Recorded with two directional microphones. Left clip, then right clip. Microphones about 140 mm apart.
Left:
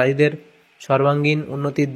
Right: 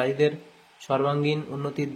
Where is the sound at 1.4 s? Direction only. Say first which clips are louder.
Left 8 dB; 30° left (ahead or behind).